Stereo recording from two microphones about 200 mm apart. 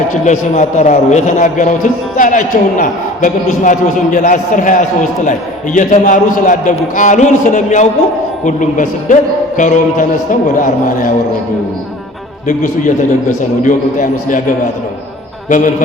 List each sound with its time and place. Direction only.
0.3 s a man's voice: 35° left (ahead or behind)
12.8 s a man's voice: 40° left (ahead or behind)
15.4 s a man's voice: 40° left (ahead or behind)